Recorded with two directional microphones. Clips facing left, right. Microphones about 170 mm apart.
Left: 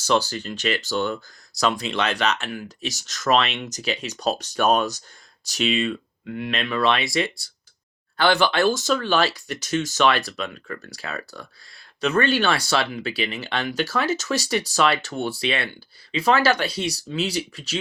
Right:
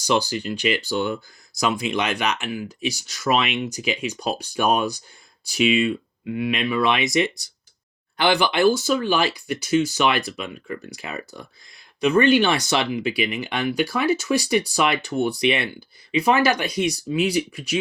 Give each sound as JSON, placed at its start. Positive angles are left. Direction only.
{"t": 0.0, "sound": "speech", "side_deg": -15}